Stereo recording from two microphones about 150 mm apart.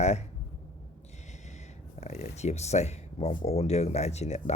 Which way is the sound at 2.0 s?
45° left (ahead or behind).